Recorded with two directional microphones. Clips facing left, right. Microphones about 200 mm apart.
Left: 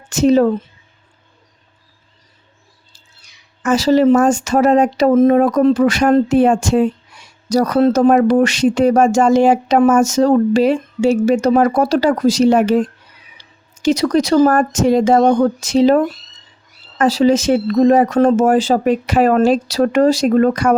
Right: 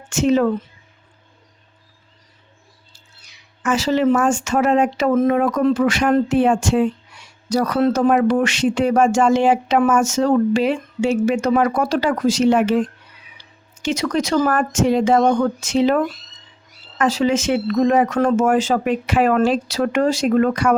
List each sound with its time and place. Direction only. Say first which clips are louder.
0.1 s speech: left 4 dB; 40° left (ahead or behind)
3.6 s speech: left 5 dB; 40° left (ahead or behind)